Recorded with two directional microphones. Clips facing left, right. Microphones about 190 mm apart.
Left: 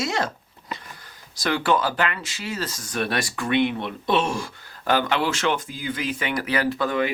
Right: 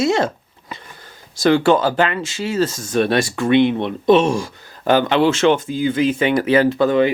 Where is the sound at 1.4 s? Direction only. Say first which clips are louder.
Right 8 dB; 25° right (ahead or behind).